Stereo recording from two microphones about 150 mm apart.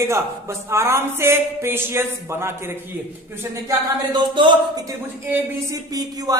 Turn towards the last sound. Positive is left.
turn(degrees=-25)  # may be behind; listen again after turning